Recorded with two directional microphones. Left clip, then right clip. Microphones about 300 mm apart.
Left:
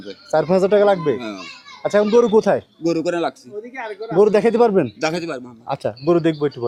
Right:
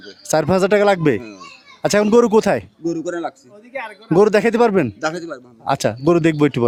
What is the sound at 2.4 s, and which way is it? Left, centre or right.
Speech, right.